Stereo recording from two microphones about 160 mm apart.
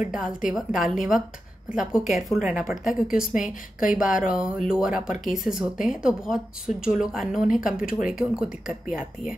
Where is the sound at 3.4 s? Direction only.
55° left (ahead or behind).